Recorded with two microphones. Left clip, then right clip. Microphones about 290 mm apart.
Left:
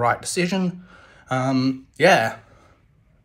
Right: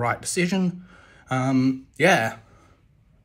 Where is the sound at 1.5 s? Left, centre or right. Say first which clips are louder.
Even; centre.